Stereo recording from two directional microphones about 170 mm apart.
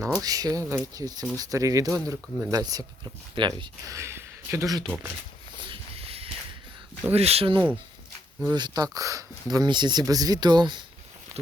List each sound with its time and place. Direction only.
0.2 s speech: 20° right (ahead or behind)
5.7 s a sound: 35° right (ahead or behind)
7.1 s speech: 35° right (ahead or behind)